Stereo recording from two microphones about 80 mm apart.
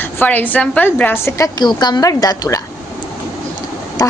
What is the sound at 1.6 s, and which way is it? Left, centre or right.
Speech, left.